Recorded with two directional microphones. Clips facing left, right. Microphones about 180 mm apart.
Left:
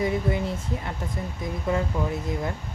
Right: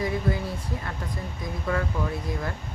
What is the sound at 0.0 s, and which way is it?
Speech, 20° left (ahead or behind).